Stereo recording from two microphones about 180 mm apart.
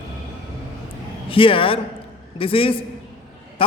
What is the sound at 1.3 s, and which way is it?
A man's voice, 30° left (ahead or behind).